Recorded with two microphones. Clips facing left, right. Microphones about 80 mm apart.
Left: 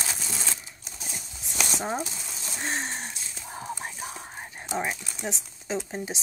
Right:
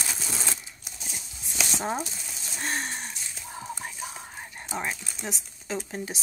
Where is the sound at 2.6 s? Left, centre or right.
Left.